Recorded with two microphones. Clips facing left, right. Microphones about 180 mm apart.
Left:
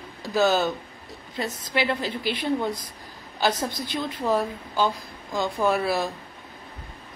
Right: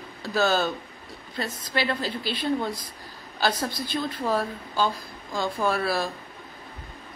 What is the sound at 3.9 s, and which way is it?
A woman's voice, 15° left (ahead or behind).